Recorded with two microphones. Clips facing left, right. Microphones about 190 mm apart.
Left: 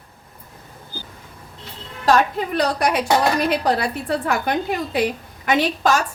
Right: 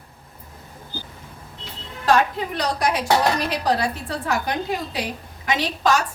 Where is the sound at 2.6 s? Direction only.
60° left (ahead or behind).